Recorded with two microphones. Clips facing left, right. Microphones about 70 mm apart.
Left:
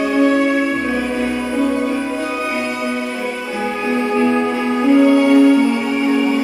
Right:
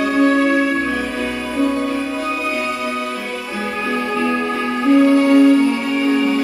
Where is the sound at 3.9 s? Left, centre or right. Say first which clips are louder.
Left 4 dB; left.